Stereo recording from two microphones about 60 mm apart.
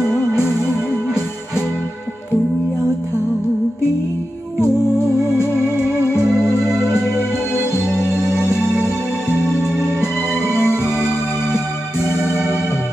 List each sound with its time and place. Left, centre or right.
9.6 s music: left